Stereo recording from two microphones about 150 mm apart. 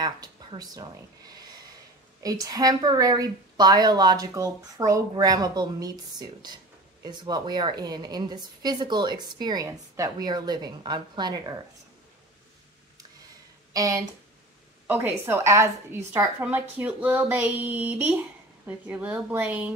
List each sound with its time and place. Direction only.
0.0 s a woman's voice: 25° right (ahead or behind)
13.7 s a woman's voice: 20° right (ahead or behind)